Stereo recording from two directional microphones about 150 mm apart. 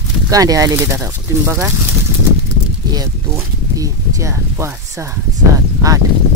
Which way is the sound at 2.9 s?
25° right (ahead or behind).